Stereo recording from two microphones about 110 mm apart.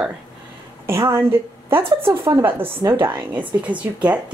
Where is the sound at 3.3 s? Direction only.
15° right (ahead or behind).